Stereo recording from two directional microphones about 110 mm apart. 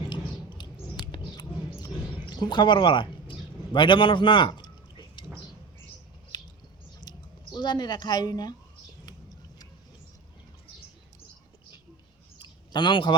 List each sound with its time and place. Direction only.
0.1 s mouse: 45° left (ahead or behind)
6.3 s squish: 40° left (ahead or behind)
7.0 s speech: 40° left (ahead or behind)
12.4 s a sound: 40° left (ahead or behind)